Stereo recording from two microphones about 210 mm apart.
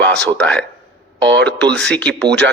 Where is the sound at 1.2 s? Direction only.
55° right (ahead or behind).